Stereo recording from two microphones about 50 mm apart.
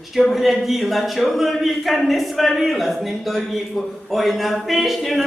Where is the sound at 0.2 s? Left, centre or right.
Centre.